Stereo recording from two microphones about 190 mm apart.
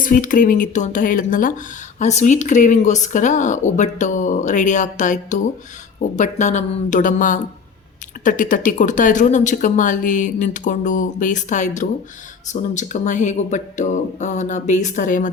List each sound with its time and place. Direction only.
0.0 s speech: 45° left (ahead or behind)